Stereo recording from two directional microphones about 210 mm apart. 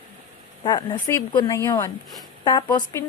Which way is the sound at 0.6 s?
20° left (ahead or behind).